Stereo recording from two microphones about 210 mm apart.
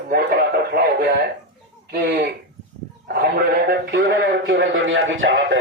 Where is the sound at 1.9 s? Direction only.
50° right (ahead or behind).